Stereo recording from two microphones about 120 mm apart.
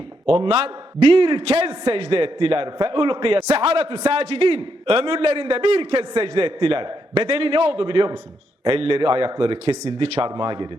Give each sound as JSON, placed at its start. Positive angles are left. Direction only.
{"t": 0.3, "sound": "a man's voice", "side_deg": -55}